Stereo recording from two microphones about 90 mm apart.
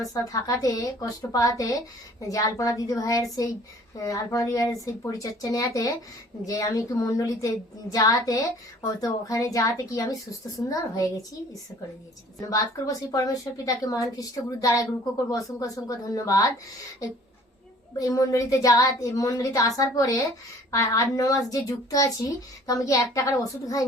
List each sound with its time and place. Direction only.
0.1 s a woman's voice: 40° left (ahead or behind)
12.4 s a woman's voice: 40° left (ahead or behind)
18.0 s a woman's voice: 40° left (ahead or behind)